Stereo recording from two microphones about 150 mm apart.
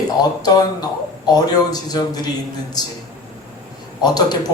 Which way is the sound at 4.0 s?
25° left (ahead or behind).